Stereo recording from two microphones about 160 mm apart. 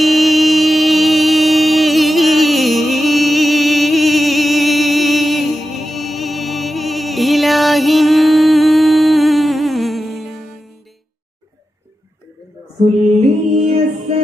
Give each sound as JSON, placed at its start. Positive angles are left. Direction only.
{"t": 0.0, "sound": "music", "side_deg": 0}
{"t": 13.7, "sound": "music", "side_deg": -45}